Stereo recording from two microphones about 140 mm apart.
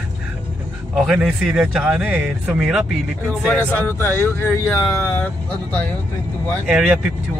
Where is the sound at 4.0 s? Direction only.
15° left (ahead or behind).